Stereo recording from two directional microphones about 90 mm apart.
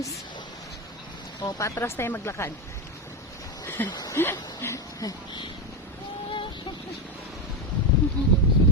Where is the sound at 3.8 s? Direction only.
50° left (ahead or behind).